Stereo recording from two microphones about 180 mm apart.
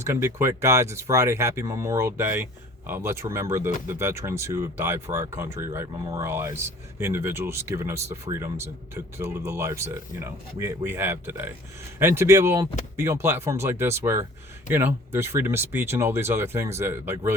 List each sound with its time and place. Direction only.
0.0 s speech: 15° right (ahead or behind)